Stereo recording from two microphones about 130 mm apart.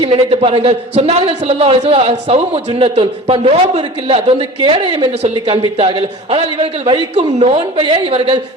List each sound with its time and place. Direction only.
0.0 s a man's voice: 45° right (ahead or behind)
7.2 s a man's voice: 55° right (ahead or behind)